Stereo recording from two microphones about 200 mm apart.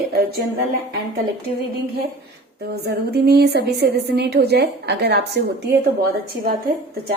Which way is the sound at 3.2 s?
55° right (ahead or behind).